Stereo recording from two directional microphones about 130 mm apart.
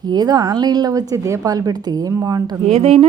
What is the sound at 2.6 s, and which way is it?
Speech, 50° right (ahead or behind).